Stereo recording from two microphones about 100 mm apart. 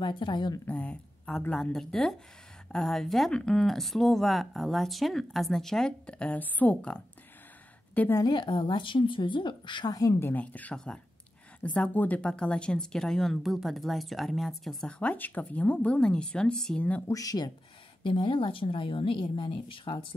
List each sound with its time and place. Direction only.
0.0 s a woman's voice: 55° left (ahead or behind)
0.7 s speech: 15° left (ahead or behind)
8.3 s a woman's voice: 50° left (ahead or behind)
10.2 s speech: 15° left (ahead or behind)
17.1 s speech: 35° left (ahead or behind)
18.0 s speech: 55° left (ahead or behind)